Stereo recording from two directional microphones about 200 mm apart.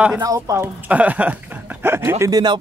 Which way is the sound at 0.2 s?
15° right (ahead or behind).